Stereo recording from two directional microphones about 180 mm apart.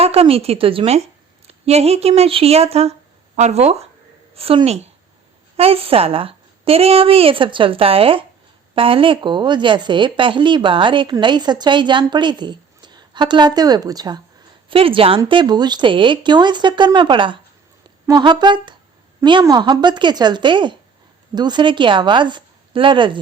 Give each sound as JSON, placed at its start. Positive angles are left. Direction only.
{"t": 0.0, "sound": "a woman's voice", "side_deg": -35}